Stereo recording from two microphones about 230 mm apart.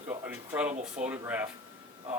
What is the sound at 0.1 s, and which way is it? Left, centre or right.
Speech, centre.